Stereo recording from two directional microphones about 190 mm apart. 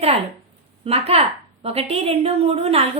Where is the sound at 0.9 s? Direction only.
30° right (ahead or behind).